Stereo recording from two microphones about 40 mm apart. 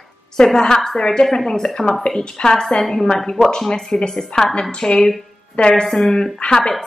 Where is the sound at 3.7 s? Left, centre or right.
Centre.